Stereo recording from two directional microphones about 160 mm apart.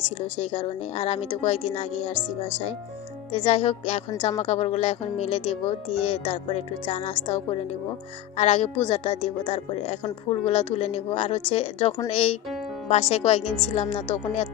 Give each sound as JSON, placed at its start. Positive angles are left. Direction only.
{"t": 0.5, "sound": "speech", "side_deg": 35}
{"t": 3.3, "sound": "speech", "side_deg": 35}
{"t": 6.8, "sound": "speech", "side_deg": 35}